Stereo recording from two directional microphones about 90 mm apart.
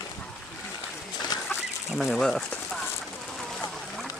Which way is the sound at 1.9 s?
Centre (ahead or behind).